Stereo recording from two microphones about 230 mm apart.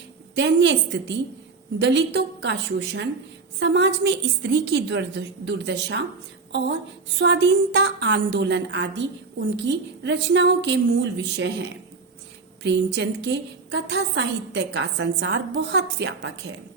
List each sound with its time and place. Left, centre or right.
0.3 s a woman's voice: right
7.2 s a woman's voice: right
12.6 s a woman's voice: right